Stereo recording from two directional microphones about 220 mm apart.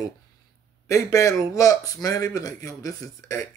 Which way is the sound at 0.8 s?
15° left (ahead or behind).